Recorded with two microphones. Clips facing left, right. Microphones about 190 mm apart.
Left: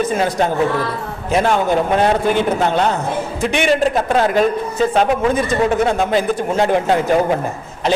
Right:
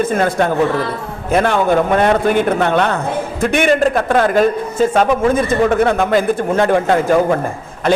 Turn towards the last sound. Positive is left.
turn(degrees=-55)  # may be behind; listen again after turning